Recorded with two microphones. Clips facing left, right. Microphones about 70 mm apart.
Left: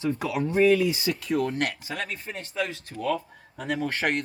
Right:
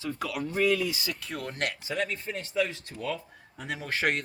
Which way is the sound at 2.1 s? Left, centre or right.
Centre.